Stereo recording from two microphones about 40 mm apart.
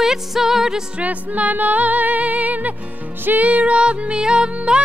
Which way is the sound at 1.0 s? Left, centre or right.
Right.